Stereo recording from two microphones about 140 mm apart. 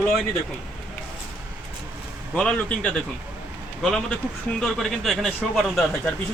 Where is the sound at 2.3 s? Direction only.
10° left (ahead or behind).